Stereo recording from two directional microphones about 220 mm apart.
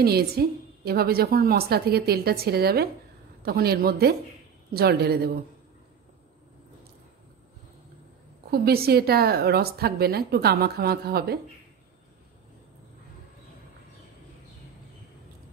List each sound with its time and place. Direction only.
0.0 s a woman's voice: 45° right (ahead or behind)
8.5 s a woman's voice: 45° right (ahead or behind)